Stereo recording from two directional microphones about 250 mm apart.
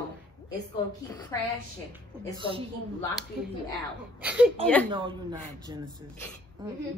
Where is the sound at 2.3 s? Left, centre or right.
Right.